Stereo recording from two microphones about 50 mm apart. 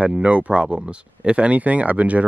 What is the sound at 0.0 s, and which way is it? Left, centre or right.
Speech, right.